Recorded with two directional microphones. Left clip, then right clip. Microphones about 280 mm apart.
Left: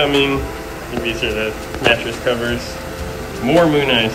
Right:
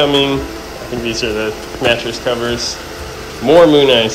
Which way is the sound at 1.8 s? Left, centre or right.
Right.